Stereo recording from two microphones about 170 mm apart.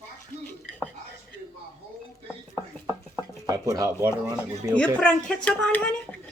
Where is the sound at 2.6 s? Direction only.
15° right (ahead or behind).